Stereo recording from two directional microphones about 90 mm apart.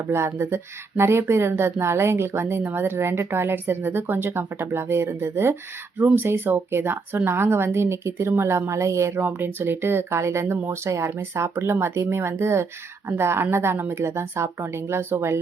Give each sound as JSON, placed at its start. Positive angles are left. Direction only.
{"t": 0.1, "sound": "speech", "side_deg": -30}